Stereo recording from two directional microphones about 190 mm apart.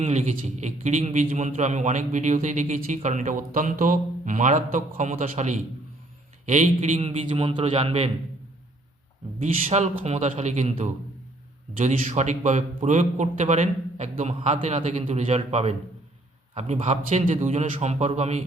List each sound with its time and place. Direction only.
0.0 s a man's voice: 35° right (ahead or behind)
9.4 s a man's voice: 35° right (ahead or behind)